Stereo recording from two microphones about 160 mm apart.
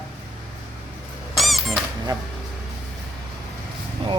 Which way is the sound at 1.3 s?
Centre (ahead or behind).